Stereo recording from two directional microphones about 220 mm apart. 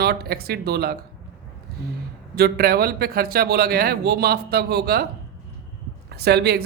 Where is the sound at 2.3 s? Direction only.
45° right (ahead or behind).